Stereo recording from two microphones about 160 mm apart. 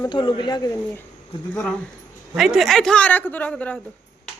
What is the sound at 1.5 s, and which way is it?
A man's voice, 5° left (ahead or behind).